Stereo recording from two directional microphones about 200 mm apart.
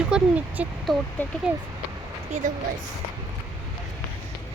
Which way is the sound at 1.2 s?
10° left (ahead or behind).